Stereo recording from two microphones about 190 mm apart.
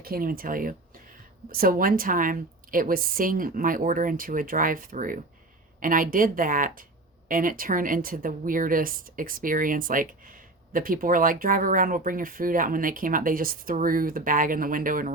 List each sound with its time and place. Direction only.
0.0 s speech: 50° right (ahead or behind)